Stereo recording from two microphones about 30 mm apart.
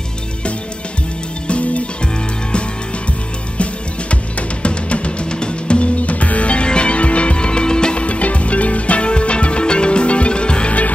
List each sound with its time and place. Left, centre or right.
1.5 s music: left
4.1 s music: left
6.0 s music: left